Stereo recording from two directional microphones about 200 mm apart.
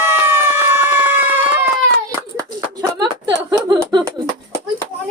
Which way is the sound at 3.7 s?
20° right (ahead or behind).